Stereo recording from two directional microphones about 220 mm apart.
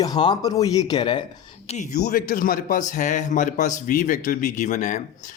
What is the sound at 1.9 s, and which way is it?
A man's voice, 45° left (ahead or behind).